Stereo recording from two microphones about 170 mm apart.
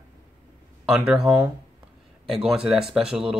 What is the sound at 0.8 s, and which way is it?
Speech, 5° right (ahead or behind).